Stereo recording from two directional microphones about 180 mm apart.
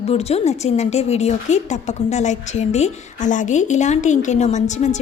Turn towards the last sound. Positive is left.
turn(degrees=40)  # may be behind; listen again after turning